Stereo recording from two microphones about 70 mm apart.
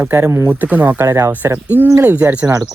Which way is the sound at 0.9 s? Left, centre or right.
Right.